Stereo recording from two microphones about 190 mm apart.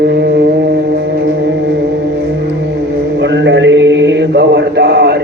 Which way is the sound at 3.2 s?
70° right (ahead or behind).